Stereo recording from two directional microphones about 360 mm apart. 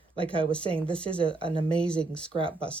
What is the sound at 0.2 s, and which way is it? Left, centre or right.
Speech, centre.